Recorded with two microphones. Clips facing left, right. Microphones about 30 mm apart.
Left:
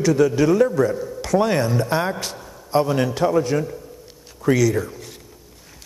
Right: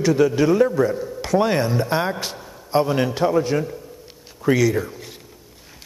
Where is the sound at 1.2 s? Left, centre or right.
Centre.